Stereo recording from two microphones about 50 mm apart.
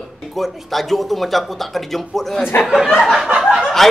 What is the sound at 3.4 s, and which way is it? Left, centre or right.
Snicker, centre.